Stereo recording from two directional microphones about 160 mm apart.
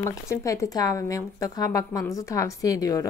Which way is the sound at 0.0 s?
20° left (ahead or behind).